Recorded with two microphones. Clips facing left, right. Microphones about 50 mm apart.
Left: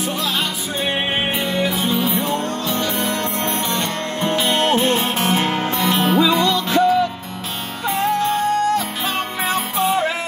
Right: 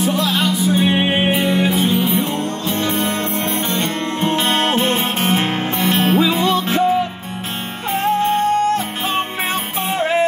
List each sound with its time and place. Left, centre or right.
0.0 s music: centre
1.3 s music: centre
1.9 s music: right
8.0 s music: right